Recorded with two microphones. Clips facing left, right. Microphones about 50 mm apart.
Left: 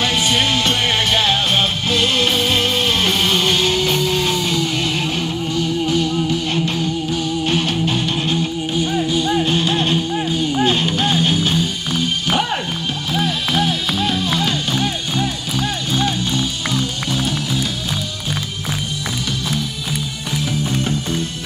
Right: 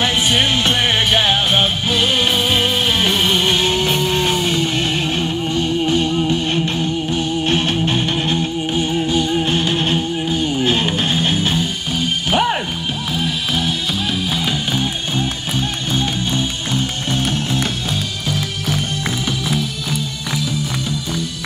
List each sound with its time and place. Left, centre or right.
0.0 s music: right
12.3 s music: centre
13.1 s music: centre
15.9 s music: right